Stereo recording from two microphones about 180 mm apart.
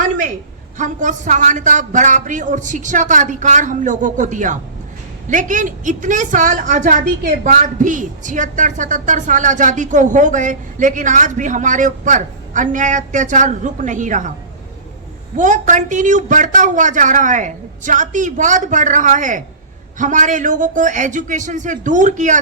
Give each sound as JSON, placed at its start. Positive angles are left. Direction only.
{"t": 0.8, "sound": "a woman's voice", "side_deg": -45}
{"t": 15.4, "sound": "a woman's voice", "side_deg": -45}